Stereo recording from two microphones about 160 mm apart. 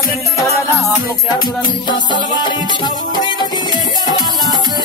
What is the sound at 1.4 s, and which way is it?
Music, 30° left (ahead or behind).